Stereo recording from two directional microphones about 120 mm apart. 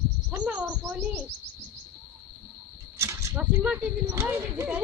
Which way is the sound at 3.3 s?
10° right (ahead or behind).